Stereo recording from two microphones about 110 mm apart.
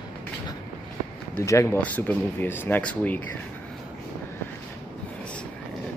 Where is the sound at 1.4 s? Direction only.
25° left (ahead or behind).